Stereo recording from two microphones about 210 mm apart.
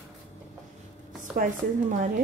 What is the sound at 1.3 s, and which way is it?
Speech, 40° right (ahead or behind).